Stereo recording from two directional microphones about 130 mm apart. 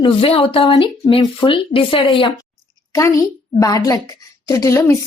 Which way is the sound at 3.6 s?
25° left (ahead or behind).